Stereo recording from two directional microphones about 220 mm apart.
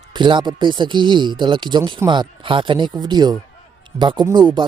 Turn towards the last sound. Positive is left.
turn(degrees=-20)  # may be behind; listen again after turning